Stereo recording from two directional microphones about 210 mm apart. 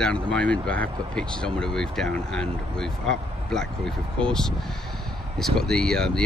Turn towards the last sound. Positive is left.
turn(degrees=5)  # may be behind; listen again after turning